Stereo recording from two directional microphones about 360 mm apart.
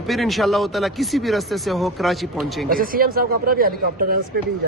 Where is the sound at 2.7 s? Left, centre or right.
Right.